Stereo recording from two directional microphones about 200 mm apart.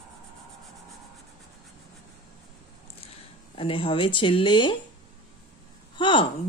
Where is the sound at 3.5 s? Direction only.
25° left (ahead or behind).